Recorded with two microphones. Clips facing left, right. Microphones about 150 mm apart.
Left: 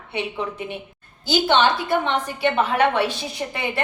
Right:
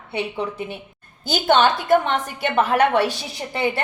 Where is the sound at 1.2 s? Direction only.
50° right (ahead or behind).